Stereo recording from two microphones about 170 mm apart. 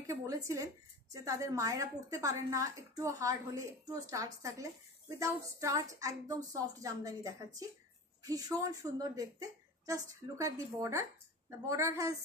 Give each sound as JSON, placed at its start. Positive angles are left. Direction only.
{"t": 0.0, "sound": "a woman's voice", "side_deg": -20}